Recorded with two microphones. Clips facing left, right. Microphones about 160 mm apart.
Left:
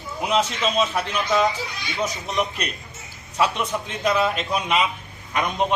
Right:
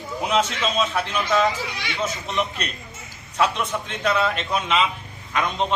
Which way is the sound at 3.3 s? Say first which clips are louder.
Even; 5° left (ahead or behind).